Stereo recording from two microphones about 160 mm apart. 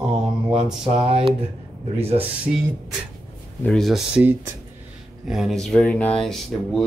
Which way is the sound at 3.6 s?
5° left (ahead or behind).